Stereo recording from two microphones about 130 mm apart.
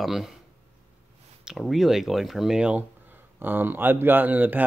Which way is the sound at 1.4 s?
Centre (ahead or behind).